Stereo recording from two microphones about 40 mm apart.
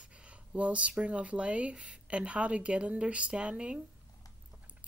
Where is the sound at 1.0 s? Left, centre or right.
Right.